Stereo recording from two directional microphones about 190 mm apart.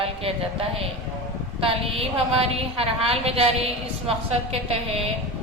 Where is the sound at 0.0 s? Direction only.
30° right (ahead or behind).